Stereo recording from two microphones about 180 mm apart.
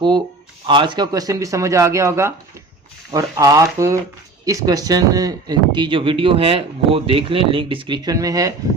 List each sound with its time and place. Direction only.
0.7 s speech: 25° right (ahead or behind)